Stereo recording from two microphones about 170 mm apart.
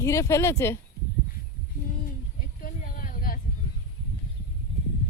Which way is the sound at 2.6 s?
55° left (ahead or behind).